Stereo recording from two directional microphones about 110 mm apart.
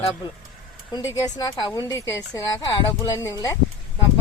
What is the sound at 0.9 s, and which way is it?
Speech, 40° left (ahead or behind).